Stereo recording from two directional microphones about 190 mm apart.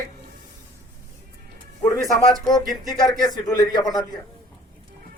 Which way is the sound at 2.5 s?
Centre (ahead or behind).